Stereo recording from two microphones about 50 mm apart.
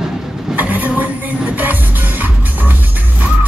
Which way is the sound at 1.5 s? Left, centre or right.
Right.